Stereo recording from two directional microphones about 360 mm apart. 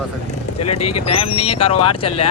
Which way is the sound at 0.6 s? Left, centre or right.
Left.